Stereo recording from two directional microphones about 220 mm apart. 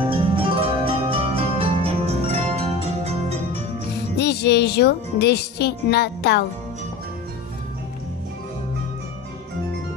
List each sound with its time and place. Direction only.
0.0 s music: 25° right (ahead or behind)
4.2 s speech: 50° left (ahead or behind)